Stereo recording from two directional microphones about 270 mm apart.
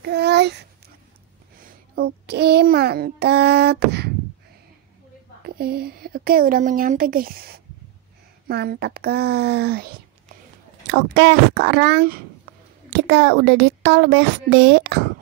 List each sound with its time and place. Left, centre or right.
0.0 s babbling: right
1.6 s child singing: right
5.6 s speech: right